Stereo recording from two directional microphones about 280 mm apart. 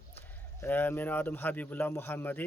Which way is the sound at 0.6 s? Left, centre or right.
Centre.